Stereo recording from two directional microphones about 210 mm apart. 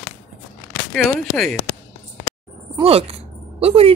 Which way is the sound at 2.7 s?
30° right (ahead or behind).